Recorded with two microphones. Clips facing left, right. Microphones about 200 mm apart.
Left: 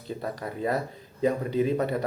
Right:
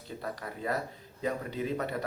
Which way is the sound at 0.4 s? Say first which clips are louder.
Left 6 dB; 25° left (ahead or behind).